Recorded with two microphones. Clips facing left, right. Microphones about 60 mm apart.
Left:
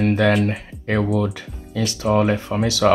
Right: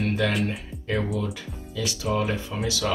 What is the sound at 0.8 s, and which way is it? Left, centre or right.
Speech, left.